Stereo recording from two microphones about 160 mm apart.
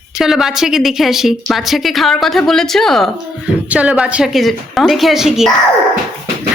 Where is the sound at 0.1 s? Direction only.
Centre (ahead or behind).